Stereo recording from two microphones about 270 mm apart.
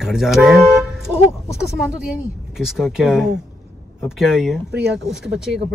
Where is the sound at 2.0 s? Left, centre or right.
Centre.